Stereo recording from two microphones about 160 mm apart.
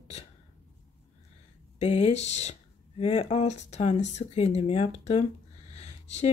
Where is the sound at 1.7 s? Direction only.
40° left (ahead or behind).